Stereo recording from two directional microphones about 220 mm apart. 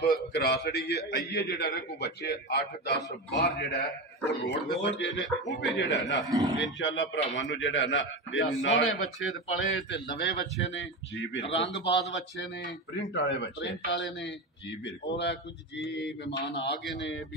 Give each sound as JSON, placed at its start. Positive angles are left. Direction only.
{"t": 0.0, "sound": "a man's voice", "side_deg": 50}
{"t": 11.3, "sound": "a man's voice", "side_deg": 55}